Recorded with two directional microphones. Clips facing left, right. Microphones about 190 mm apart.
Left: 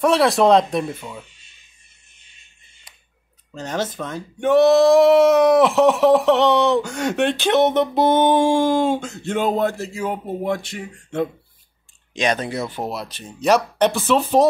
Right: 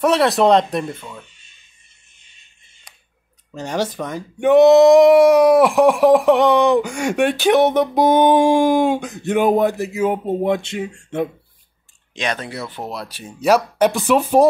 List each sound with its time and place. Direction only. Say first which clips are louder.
0.0 s speech: right 1 dB; centre (ahead or behind)
3.5 s speech: right 3 dB; 10° right (ahead or behind)
12.2 s speech: left 3 dB; 20° left (ahead or behind)
13.0 s speech: right 5 dB; 5° right (ahead or behind)